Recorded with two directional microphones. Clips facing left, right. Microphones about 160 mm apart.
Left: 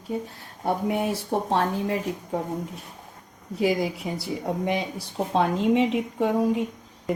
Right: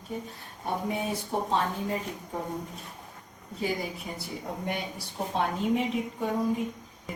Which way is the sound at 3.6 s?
90° left.